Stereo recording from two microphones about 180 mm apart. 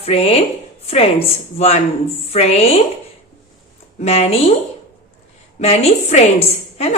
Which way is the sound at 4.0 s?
35° left (ahead or behind).